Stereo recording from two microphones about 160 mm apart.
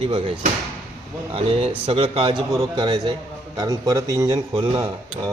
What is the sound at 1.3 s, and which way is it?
Speech, 35° right (ahead or behind).